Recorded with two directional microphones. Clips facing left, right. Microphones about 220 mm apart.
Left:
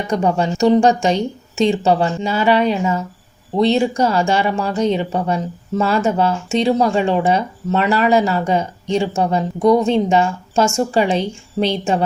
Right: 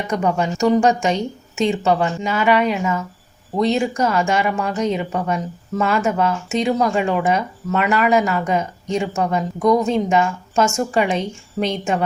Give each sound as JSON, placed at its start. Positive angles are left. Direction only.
{"t": 0.1, "sound": "speech", "side_deg": 30}